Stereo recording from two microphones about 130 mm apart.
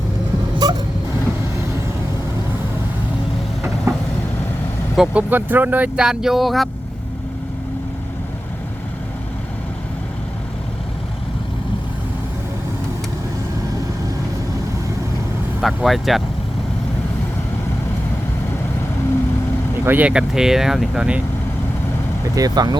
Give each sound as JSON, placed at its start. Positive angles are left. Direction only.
{"t": 0.6, "sound": "vehicle", "side_deg": -30}
{"t": 3.9, "sound": "vehicle", "side_deg": -20}
{"t": 4.9, "sound": "speech", "side_deg": -10}
{"t": 15.6, "sound": "speech", "side_deg": 0}
{"t": 19.8, "sound": "speech", "side_deg": -15}
{"t": 22.4, "sound": "speech", "side_deg": -30}